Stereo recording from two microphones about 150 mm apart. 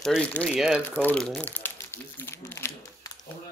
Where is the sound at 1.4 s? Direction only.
15° left (ahead or behind).